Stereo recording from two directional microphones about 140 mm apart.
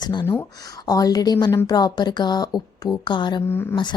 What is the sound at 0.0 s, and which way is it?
A woman's voice, 30° left (ahead or behind).